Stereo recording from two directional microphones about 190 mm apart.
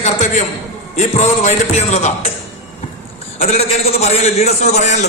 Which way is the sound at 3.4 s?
35° left (ahead or behind).